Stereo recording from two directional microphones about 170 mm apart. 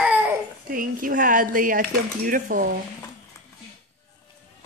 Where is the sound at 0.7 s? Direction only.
55° right (ahead or behind).